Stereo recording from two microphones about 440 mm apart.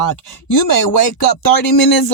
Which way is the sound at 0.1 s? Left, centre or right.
Left.